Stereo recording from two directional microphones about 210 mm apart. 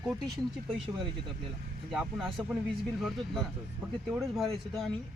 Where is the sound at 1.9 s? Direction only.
5° right (ahead or behind).